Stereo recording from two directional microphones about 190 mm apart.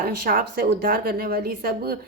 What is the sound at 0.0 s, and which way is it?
Speech, 50° right (ahead or behind).